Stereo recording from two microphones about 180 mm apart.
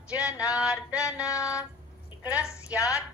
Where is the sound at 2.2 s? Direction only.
5° right (ahead or behind).